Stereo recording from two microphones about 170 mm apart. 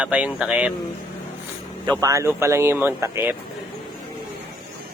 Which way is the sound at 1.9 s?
20° right (ahead or behind).